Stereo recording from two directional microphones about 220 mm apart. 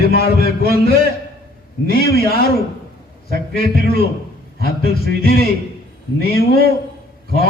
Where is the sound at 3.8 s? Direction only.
45° left (ahead or behind).